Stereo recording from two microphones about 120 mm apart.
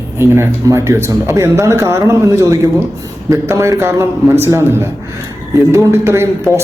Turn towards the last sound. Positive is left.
turn(degrees=-20)  # may be behind; listen again after turning